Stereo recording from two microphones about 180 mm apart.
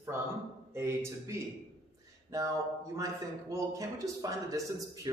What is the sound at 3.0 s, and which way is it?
A man's voice, 20° right (ahead or behind).